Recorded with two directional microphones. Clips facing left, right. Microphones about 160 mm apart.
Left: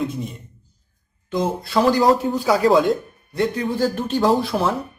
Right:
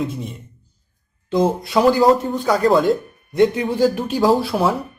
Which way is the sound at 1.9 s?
Centre (ahead or behind).